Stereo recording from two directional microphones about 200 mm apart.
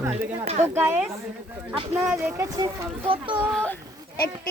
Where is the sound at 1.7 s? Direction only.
30° right (ahead or behind).